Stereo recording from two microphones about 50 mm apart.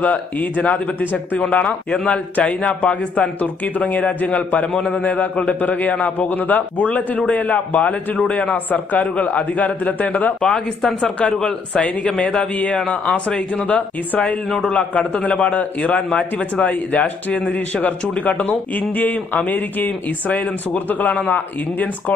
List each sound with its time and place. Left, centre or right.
0.0 s a man's voice: left
10.5 s speech: centre
11.3 s a man's voice: left